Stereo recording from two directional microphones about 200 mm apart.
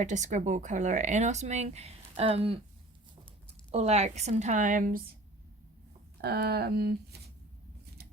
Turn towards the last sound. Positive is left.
turn(degrees=-55)  # may be behind; listen again after turning